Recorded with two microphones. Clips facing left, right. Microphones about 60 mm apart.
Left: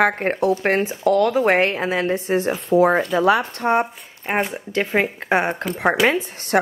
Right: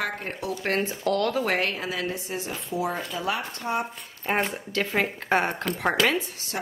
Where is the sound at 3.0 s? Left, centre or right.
Left.